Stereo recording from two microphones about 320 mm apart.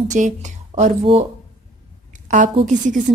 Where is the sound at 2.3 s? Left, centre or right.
Right.